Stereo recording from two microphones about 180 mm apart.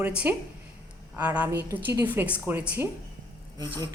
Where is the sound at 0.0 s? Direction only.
10° right (ahead or behind).